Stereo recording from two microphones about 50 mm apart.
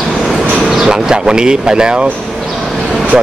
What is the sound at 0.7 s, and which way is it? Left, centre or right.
Speech, centre.